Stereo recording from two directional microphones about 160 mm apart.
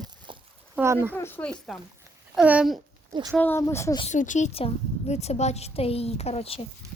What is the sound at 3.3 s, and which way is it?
Speech, 10° left (ahead or behind).